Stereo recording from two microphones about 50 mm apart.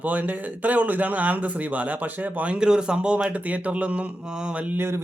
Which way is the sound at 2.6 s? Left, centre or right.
Centre.